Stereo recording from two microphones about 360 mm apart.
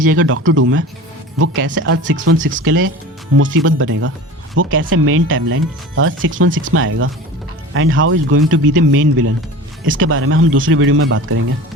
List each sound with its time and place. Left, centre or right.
0.0 s speech: right